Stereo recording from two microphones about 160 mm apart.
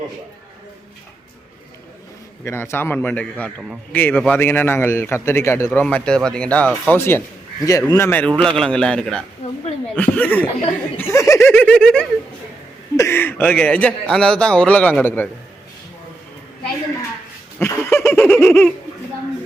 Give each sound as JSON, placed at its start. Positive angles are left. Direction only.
{"t": 2.4, "sound": "a man's voice", "side_deg": 15}
{"t": 9.4, "sound": "a woman's voice", "side_deg": 40}
{"t": 9.9, "sound": "a man's voice", "side_deg": 10}
{"t": 17.6, "sound": "giggle", "side_deg": 15}